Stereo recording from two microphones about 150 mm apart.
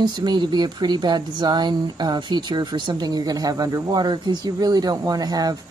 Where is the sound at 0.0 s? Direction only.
30° right (ahead or behind).